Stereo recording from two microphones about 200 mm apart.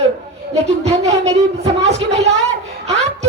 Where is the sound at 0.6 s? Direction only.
35° right (ahead or behind).